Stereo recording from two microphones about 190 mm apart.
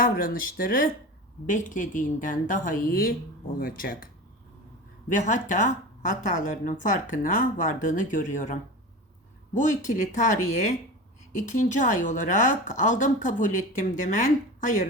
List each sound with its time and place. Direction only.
0.0 s speech: 45° left (ahead or behind)
9.6 s speech: 40° left (ahead or behind)